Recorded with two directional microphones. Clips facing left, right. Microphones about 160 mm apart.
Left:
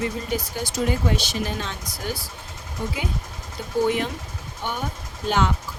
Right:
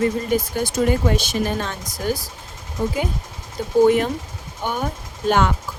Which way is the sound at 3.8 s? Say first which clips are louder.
Right 7 dB; 50° right (ahead or behind).